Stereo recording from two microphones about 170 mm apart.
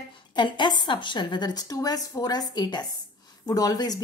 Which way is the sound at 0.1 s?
25° left (ahead or behind).